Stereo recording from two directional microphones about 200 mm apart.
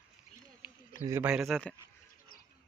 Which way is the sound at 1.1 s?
10° right (ahead or behind).